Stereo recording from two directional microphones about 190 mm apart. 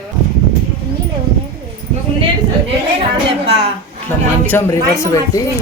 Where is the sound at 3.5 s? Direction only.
30° right (ahead or behind).